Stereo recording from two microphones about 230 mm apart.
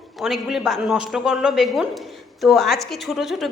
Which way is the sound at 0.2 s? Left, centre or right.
Centre.